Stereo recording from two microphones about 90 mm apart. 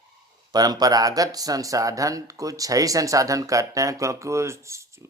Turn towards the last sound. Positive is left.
turn(degrees=-35)  # may be behind; listen again after turning